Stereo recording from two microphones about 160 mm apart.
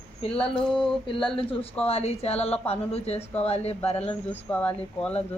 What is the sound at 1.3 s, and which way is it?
A woman's voice, 40° left (ahead or behind).